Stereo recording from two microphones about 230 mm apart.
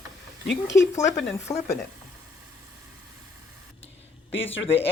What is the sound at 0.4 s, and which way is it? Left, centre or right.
Speech, left.